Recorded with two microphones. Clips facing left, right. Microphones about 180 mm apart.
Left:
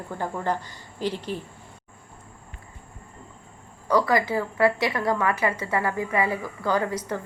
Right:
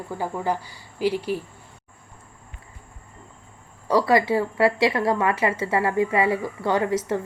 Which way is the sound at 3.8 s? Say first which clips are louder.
Right 3 dB; 25° right (ahead or behind).